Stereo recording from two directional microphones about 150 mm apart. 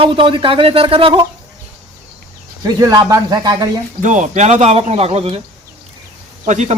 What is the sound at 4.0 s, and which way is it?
A man's voice, 55° right (ahead or behind).